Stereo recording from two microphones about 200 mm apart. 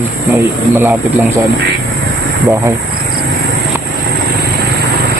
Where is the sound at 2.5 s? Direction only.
15° right (ahead or behind).